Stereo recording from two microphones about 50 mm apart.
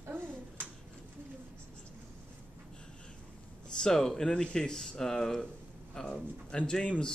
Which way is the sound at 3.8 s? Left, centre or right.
Centre.